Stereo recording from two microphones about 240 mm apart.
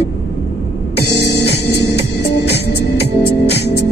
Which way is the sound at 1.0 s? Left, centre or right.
Left.